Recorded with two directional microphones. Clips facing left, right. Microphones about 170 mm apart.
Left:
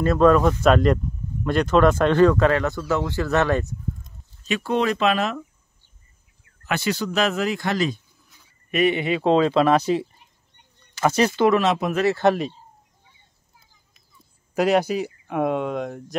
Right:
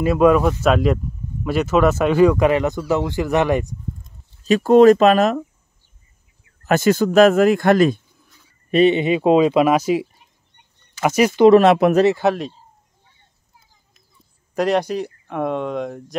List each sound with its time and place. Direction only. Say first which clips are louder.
0.0 s speech: right 2 dB; 10° right (ahead or behind)
4.5 s speech: right 12 dB; 40° right (ahead or behind)
6.6 s speech: right 9 dB; 45° right (ahead or behind)
8.6 s speech: right 6 dB; 25° right (ahead or behind); by 11.4 s 10° right (ahead or behind)
11.6 s speech: right 8 dB; 65° right (ahead or behind)
12.2 s speech: even; centre (ahead or behind)
14.5 s speech: right 1 dB; 5° left (ahead or behind)